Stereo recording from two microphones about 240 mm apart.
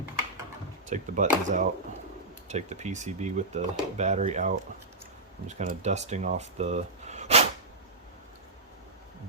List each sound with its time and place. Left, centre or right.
0.9 s speech: right